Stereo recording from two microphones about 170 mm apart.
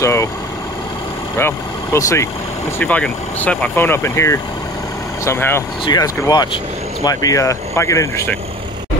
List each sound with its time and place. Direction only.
0.0 s vehicle: 15° left (ahead or behind)
1.4 s speech: 15° left (ahead or behind)